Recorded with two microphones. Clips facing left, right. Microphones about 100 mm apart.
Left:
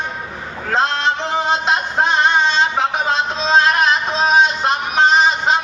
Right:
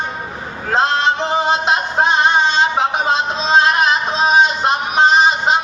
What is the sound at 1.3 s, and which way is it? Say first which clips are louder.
Music: right 2 dB; 10° right (ahead or behind).